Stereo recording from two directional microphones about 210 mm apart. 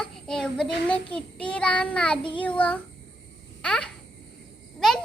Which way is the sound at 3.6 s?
5° left (ahead or behind).